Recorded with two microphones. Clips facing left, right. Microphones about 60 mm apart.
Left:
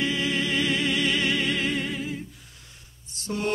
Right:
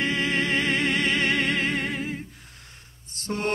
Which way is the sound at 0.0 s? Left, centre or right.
Right.